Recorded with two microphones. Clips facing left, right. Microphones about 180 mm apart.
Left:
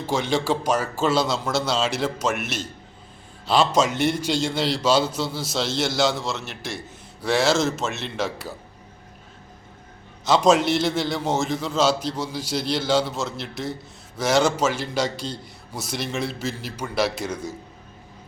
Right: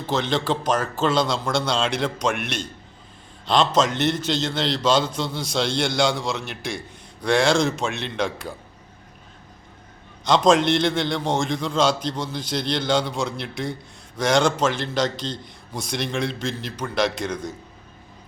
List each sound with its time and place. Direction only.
0.0 s a man's voice: 10° left (ahead or behind)
10.2 s a man's voice: 5° left (ahead or behind)